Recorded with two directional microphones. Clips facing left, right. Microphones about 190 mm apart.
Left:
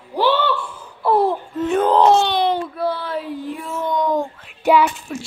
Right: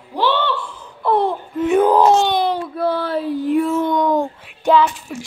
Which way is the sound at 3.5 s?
60° right (ahead or behind).